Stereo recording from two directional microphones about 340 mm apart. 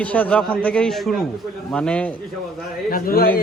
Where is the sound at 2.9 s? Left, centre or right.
Left.